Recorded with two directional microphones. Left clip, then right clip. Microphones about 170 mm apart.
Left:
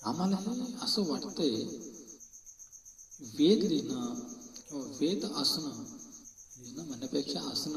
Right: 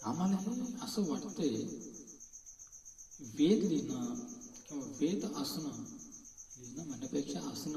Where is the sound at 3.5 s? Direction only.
15° left (ahead or behind).